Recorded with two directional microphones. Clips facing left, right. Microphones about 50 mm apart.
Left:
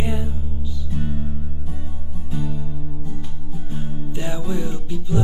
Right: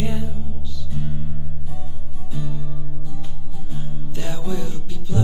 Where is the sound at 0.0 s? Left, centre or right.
Centre.